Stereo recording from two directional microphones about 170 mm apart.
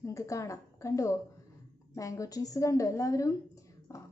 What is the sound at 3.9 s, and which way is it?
Music, 20° left (ahead or behind).